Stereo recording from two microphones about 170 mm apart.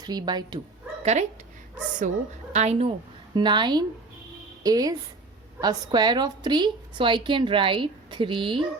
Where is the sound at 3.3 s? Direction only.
25° right (ahead or behind).